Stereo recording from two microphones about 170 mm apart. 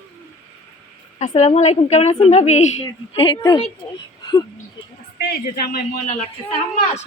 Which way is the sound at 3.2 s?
25° left (ahead or behind).